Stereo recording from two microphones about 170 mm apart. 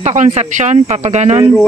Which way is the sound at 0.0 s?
40° right (ahead or behind).